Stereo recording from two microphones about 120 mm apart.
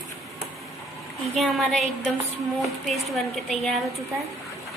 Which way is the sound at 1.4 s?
Centre (ahead or behind).